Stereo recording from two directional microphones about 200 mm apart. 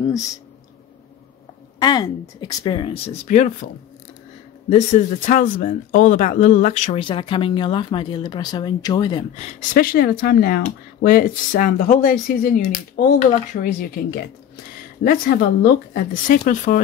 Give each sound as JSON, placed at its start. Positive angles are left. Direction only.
{"t": 1.8, "sound": "speech", "side_deg": 20}
{"t": 3.3, "sound": "speech", "side_deg": 35}
{"t": 4.6, "sound": "speech", "side_deg": 35}
{"t": 9.6, "sound": "speech", "side_deg": 45}
{"t": 15.0, "sound": "speech", "side_deg": 50}